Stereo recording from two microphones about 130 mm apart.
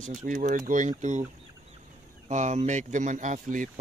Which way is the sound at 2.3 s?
65° right (ahead or behind).